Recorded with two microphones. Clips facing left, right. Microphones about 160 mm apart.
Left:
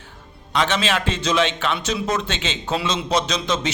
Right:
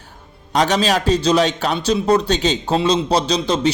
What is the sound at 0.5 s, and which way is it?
A man's voice, 40° right (ahead or behind).